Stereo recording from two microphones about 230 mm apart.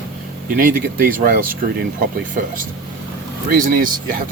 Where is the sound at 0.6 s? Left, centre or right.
Right.